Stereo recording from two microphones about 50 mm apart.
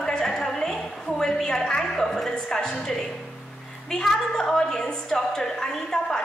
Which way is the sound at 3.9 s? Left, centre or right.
Centre.